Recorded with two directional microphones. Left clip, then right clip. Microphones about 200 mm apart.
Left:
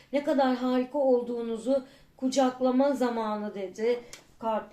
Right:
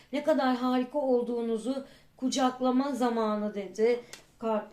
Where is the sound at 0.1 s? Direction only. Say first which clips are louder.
Left 1 dB; 30° right (ahead or behind).